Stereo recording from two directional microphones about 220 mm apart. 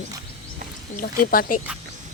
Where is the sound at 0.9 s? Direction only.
40° left (ahead or behind).